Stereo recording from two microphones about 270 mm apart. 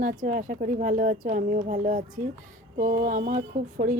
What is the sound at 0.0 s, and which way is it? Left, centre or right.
A woman's voice, right.